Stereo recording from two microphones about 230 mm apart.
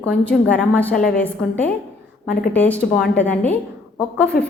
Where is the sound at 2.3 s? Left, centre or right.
Left.